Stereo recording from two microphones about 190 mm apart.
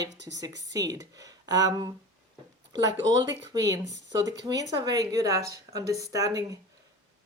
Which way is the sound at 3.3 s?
20° right (ahead or behind).